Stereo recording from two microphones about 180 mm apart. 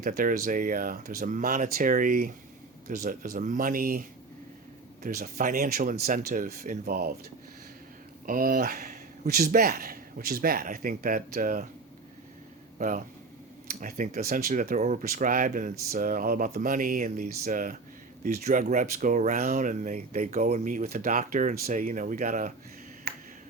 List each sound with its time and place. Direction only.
0.0 s speech: 50° right (ahead or behind)
5.0 s speech: 50° right (ahead or behind)
8.3 s speech: 50° right (ahead or behind)
13.7 s speech: 50° right (ahead or behind)
23.1 s finger snapping: 60° right (ahead or behind)